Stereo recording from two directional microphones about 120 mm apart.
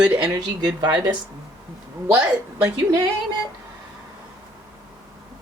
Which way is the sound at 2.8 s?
35° right (ahead or behind).